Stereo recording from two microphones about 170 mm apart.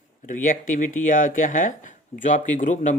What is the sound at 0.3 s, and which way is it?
Speech, 50° left (ahead or behind).